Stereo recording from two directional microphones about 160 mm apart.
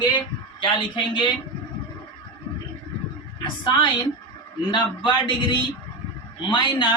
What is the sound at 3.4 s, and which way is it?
A woman's voice, 30° left (ahead or behind).